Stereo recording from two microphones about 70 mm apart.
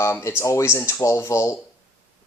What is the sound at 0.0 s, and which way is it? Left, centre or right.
Speech, left.